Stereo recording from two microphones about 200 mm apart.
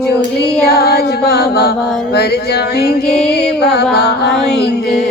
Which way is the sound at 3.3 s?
55° left (ahead or behind).